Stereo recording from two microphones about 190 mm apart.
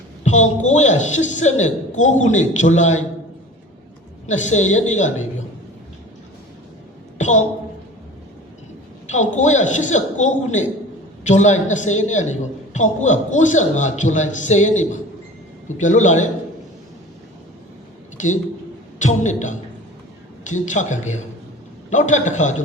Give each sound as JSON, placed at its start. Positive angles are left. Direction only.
{"t": 0.3, "sound": "a woman's voice", "side_deg": 40}
{"t": 4.3, "sound": "a woman's voice", "side_deg": 40}
{"t": 7.2, "sound": "a woman's voice", "side_deg": 40}
{"t": 9.0, "sound": "a woman's voice", "side_deg": 40}
{"t": 18.2, "sound": "a woman's voice", "side_deg": 40}